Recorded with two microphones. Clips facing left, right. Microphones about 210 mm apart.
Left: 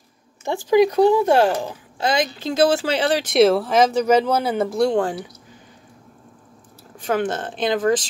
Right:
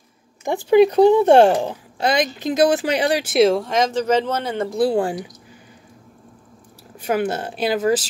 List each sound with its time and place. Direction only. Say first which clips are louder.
0.5 s speech: right 2 dB; 15° right (ahead or behind)
1.1 s speech: right 4 dB; 30° right (ahead or behind); by 3.3 s 10° right (ahead or behind)
3.3 s speech: left 2 dB; 5° left (ahead or behind)
7.0 s speech: right 1 dB; 10° right (ahead or behind)